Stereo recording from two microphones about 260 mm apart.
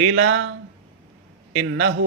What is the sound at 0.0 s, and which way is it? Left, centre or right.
Speech, right.